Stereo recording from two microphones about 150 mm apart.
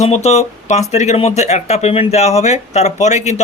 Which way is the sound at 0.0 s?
45° left (ahead or behind).